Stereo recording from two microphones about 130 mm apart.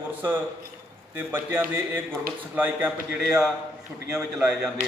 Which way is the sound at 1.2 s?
20° right (ahead or behind).